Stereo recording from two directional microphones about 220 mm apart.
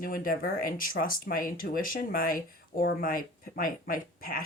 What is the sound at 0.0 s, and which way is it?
Speech, 40° left (ahead or behind).